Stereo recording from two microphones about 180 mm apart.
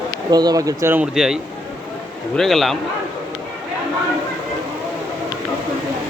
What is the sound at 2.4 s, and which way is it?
Speech, centre (ahead or behind).